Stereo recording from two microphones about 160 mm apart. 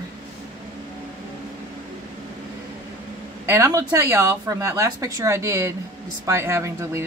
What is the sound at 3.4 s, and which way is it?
Speech, 20° right (ahead or behind).